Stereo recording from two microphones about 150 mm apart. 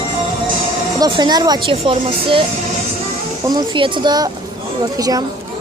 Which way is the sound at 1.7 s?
40° right (ahead or behind).